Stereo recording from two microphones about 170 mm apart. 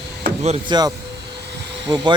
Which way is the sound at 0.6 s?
25° right (ahead or behind).